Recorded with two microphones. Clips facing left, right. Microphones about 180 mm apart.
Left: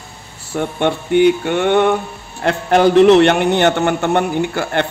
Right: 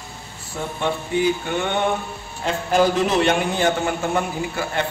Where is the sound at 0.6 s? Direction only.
70° left (ahead or behind).